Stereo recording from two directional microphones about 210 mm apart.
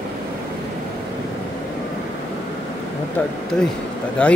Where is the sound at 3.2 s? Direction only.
10° left (ahead or behind).